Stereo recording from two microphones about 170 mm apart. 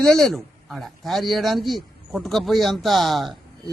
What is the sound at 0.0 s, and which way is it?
Speech, 5° left (ahead or behind).